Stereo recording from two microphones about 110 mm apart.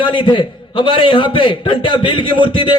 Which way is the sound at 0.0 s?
45° left (ahead or behind).